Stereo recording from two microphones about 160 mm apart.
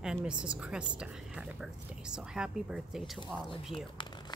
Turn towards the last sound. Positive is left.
turn(degrees=30)  # may be behind; listen again after turning